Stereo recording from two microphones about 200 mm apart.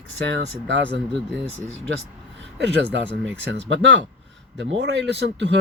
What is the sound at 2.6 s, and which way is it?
Speech, 60° right (ahead or behind).